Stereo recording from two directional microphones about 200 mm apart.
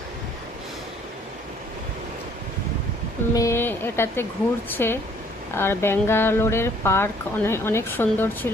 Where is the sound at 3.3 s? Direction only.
15° left (ahead or behind).